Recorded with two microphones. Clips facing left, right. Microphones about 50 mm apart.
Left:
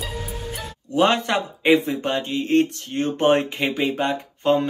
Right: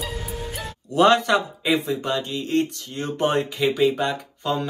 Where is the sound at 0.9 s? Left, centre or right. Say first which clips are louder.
Right 2 dB; left.